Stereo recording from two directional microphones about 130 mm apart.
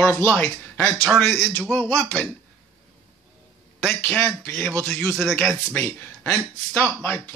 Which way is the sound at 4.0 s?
10° left (ahead or behind).